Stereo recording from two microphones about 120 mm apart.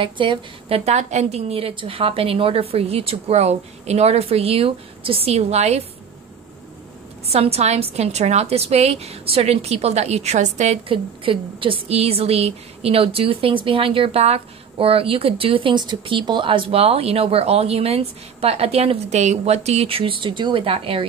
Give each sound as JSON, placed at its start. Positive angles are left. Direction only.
{"t": 0.0, "sound": "a woman's voice", "side_deg": -45}
{"t": 7.2, "sound": "a woman's voice", "side_deg": -55}
{"t": 10.9, "sound": "a woman's voice", "side_deg": -45}